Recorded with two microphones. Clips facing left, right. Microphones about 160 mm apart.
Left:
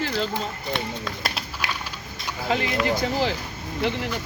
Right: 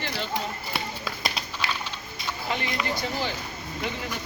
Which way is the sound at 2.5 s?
90° left.